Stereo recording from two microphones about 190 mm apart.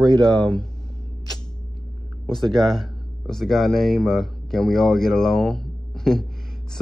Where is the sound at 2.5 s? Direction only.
Centre (ahead or behind).